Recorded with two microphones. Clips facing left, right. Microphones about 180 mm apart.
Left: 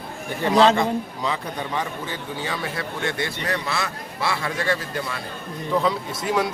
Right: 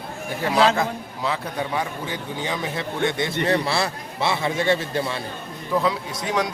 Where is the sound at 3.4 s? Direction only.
30° right (ahead or behind).